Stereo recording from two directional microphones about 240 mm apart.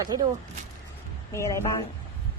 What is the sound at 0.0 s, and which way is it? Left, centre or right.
Speech, centre.